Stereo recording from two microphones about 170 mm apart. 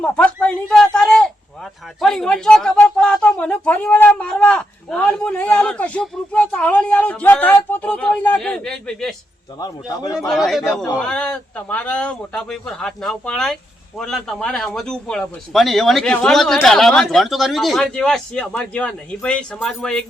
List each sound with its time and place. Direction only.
0.0 s speech: 5° left (ahead or behind)
9.6 s a man's voice: 20° left (ahead or behind)
10.2 s speech: centre (ahead or behind)